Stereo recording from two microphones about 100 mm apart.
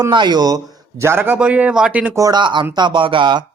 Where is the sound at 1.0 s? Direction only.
20° right (ahead or behind).